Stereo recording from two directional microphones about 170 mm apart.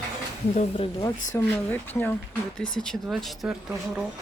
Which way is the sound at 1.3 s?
10° left (ahead or behind).